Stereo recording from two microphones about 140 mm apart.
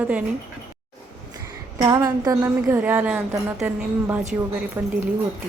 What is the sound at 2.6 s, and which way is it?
A woman's voice, 10° right (ahead or behind).